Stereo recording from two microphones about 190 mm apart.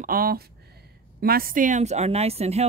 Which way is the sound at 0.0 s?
50° right (ahead or behind).